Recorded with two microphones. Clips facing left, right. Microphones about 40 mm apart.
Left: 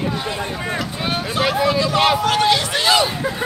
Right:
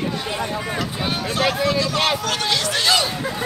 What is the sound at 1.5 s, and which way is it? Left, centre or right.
Speech, centre.